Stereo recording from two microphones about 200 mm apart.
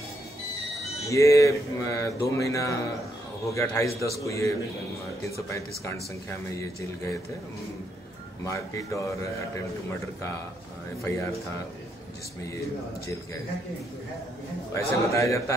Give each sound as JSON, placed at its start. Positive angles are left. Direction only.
{"t": 1.0, "sound": "a man's voice", "side_deg": 15}
{"t": 8.5, "sound": "a man's voice", "side_deg": 15}
{"t": 13.0, "sound": "a man's voice", "side_deg": 15}
{"t": 14.7, "sound": "a man's voice", "side_deg": 15}